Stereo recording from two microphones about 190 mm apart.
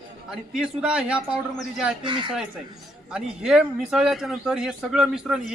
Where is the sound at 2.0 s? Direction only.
25° right (ahead or behind).